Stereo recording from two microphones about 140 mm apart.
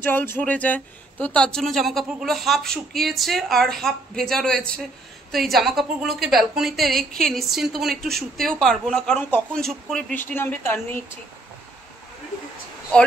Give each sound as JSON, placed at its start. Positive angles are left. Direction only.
{"t": 0.0, "sound": "speech", "side_deg": 15}
{"t": 10.1, "sound": "speech", "side_deg": 15}